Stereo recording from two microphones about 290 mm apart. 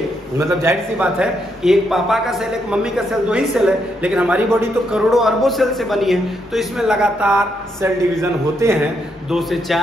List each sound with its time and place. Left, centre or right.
0.4 s a man's voice: centre